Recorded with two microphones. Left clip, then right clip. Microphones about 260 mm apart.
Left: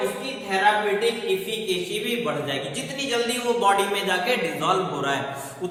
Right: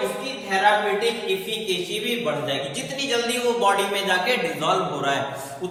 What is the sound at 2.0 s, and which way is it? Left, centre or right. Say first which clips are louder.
A man's voice: right 1 dB; centre.